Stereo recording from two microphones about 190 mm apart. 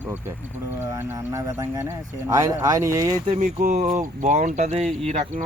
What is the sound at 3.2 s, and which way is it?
Speech, 40° right (ahead or behind).